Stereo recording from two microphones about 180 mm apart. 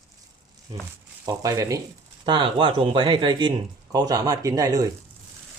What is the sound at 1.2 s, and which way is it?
Speech, 20° right (ahead or behind).